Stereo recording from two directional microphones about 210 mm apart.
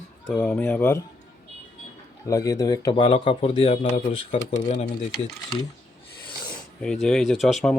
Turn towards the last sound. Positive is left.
turn(degrees=0)  # may be behind; listen again after turning